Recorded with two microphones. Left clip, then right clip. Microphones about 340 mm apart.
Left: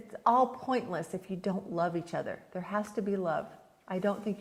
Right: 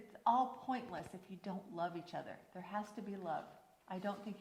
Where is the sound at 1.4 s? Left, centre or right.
Left.